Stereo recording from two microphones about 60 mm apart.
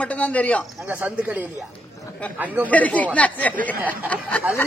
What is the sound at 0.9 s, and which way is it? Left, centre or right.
Speech, right.